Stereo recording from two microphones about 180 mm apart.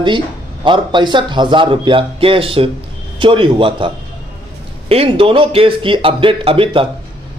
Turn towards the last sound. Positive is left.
turn(degrees=-30)  # may be behind; listen again after turning